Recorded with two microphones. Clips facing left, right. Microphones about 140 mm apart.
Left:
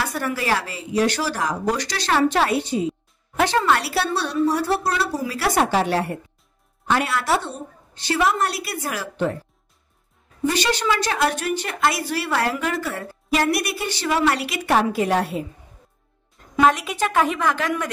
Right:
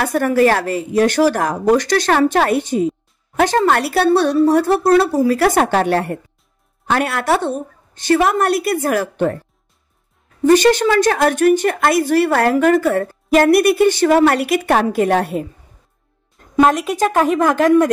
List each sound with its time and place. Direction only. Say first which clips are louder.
0.0 s a woman's voice: right 11 dB; 50° right (ahead or behind)
10.5 s a woman's voice: right 12 dB; 50° right (ahead or behind)
16.6 s a woman's voice: right 3 dB; 45° right (ahead or behind)